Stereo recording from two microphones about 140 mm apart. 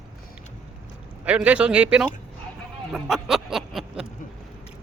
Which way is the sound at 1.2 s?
10° right (ahead or behind).